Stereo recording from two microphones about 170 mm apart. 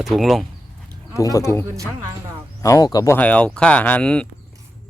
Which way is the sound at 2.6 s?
20° left (ahead or behind).